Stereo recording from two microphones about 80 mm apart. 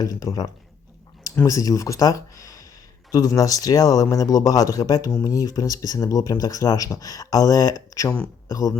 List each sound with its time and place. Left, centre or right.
0.0 s a man's voice: left